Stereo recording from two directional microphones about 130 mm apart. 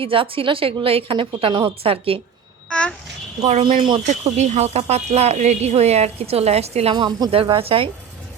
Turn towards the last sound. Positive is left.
turn(degrees=-45)  # may be behind; listen again after turning